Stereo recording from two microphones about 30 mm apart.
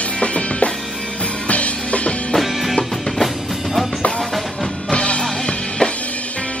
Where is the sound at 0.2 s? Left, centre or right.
Left.